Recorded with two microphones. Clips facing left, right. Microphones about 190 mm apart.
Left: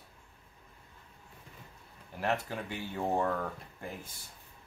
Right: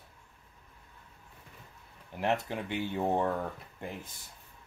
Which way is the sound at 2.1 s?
20° right (ahead or behind).